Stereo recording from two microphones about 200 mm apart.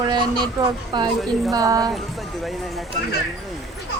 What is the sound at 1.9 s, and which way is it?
Speech, centre (ahead or behind).